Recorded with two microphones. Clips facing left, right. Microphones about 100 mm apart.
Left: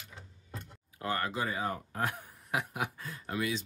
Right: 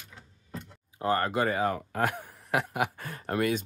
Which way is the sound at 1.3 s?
65° right (ahead or behind).